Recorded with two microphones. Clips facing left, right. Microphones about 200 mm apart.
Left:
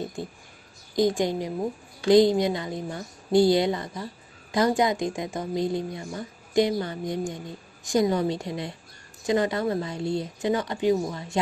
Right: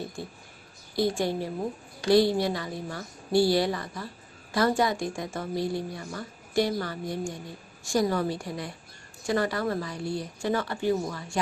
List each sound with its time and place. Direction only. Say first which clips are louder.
0.9 s a woman's voice: left 3 dB; 15° left (ahead or behind)